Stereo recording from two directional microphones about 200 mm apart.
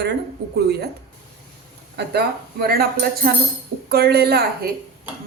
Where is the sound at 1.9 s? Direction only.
55° right (ahead or behind).